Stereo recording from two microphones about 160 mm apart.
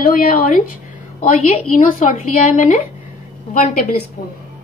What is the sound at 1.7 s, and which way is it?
Speech, 55° left (ahead or behind).